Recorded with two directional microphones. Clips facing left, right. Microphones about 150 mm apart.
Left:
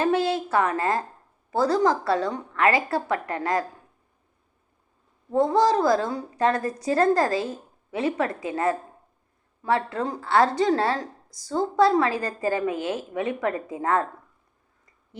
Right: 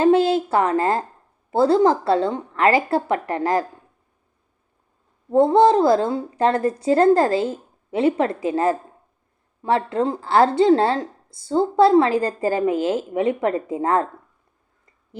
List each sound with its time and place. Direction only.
0.0 s a woman's voice: 30° right (ahead or behind)
5.3 s a woman's voice: 30° right (ahead or behind)